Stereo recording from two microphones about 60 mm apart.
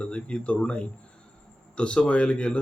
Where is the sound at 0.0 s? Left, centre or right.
Centre.